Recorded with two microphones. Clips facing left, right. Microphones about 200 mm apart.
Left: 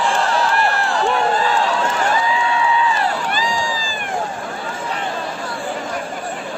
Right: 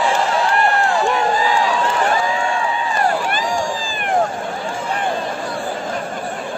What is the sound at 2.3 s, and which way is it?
Crowd, 45° right (ahead or behind).